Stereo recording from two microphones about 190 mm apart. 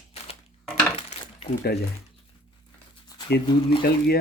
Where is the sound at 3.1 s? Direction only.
20° left (ahead or behind).